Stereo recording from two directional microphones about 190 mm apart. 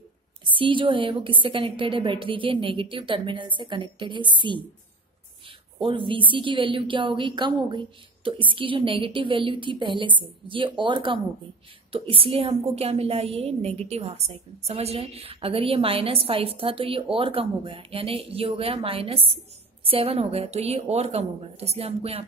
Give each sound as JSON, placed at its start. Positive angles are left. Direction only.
{"t": 0.4, "sound": "a woman's voice", "side_deg": -25}
{"t": 5.8, "sound": "a woman's voice", "side_deg": -25}